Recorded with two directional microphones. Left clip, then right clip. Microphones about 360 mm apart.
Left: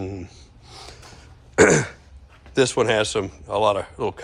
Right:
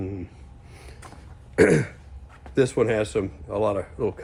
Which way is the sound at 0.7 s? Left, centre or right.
Centre.